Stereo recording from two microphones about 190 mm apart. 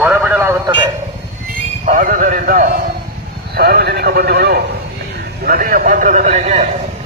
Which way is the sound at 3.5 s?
55° right (ahead or behind).